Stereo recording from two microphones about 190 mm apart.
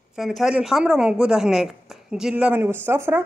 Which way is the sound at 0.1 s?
Centre (ahead or behind).